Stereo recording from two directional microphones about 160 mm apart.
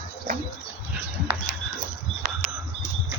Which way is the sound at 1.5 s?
5° right (ahead or behind).